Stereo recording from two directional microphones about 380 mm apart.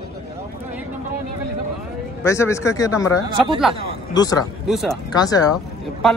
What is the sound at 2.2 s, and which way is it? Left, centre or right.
Speech, centre.